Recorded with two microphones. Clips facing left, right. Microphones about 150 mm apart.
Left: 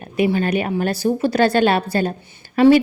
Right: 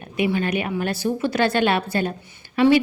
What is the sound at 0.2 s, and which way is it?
A woman's voice, 35° left (ahead or behind).